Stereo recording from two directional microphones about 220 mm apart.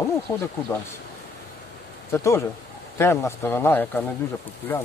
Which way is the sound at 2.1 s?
10° left (ahead or behind).